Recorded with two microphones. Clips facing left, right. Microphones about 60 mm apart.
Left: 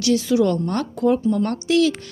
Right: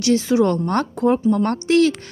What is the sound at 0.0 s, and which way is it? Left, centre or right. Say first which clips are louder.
A woman's voice: right 1 dB; right.